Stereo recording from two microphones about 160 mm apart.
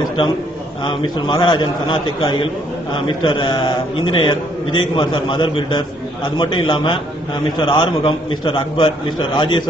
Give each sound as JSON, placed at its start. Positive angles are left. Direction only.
{"t": 0.8, "sound": "a man's voice", "side_deg": 30}